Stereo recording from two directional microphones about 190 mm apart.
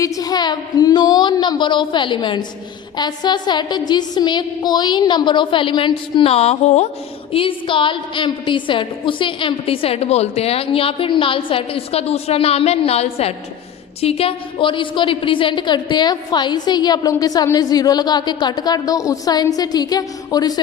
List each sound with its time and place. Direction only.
0.0 s a woman's voice: 20° left (ahead or behind)